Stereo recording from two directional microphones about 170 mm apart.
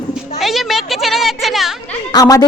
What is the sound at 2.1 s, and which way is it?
Speech, 20° left (ahead or behind).